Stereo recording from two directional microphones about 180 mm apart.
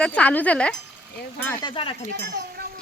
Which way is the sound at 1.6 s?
30° left (ahead or behind).